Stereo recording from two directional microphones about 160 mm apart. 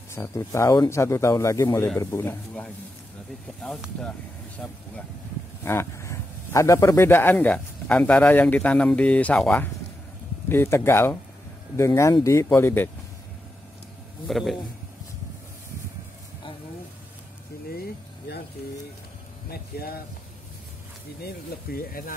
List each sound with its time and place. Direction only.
0.1 s speech: 15° left (ahead or behind)
5.7 s speech: 15° left (ahead or behind)
14.2 s speech: centre (ahead or behind)
18.3 s a sound: 90° left
19.5 s a sound: 75° left (ahead or behind)
21.2 s speech: 75° left (ahead or behind)